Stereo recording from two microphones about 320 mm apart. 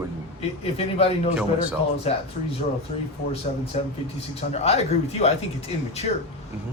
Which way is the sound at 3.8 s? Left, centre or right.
Left.